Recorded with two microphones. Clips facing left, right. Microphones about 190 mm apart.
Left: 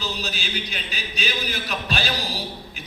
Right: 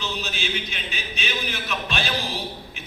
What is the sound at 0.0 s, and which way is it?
A man's voice, 35° left (ahead or behind).